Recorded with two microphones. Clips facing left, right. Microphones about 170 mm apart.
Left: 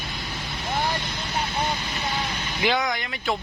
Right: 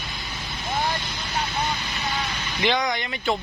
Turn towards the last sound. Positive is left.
turn(degrees=0)  # may be behind; listen again after turning